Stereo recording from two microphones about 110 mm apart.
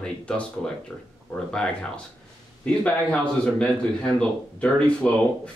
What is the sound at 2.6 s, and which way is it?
A man's voice, 10° left (ahead or behind).